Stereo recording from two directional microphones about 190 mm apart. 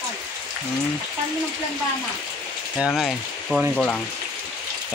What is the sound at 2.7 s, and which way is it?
Speech, centre (ahead or behind).